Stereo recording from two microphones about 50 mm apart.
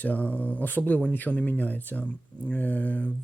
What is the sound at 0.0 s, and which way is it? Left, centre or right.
Speech, left.